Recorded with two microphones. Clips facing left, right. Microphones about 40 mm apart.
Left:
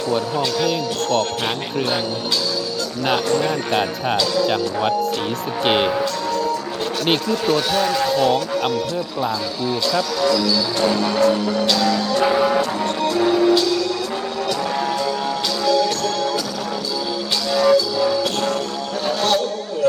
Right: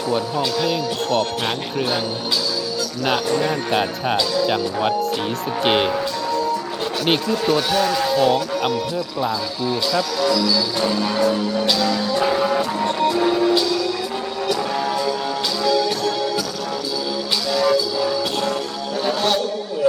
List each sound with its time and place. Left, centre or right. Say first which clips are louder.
0.1 s speech: even; centre
3.1 s speech: left 1 dB; centre
11.6 s speech: left 1 dB; centre
12.2 s music: left 3 dB; centre
12.8 s speech: even; centre
14.4 s music: right 1 dB; centre
15.6 s music: left 1 dB; centre
17.5 s music: left 3 dB; centre
19.8 s a sound: left 1 dB; centre